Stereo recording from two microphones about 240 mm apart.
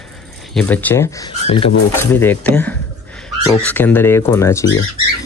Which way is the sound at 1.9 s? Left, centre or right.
Centre.